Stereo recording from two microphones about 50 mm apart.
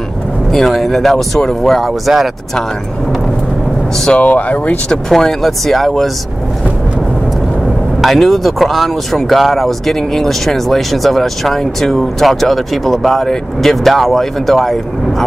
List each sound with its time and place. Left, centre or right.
0.5 s speech: centre
4.2 s speech: left
5.1 s speech: centre
8.0 s speech: centre